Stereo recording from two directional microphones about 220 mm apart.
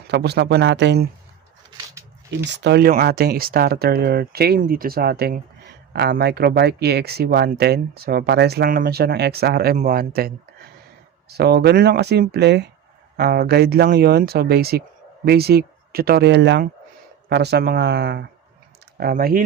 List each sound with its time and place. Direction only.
0.1 s speech: 50° right (ahead or behind)
2.4 s speech: 50° right (ahead or behind)